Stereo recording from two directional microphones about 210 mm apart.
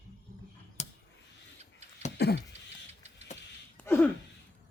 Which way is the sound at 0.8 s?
30° left (ahead or behind).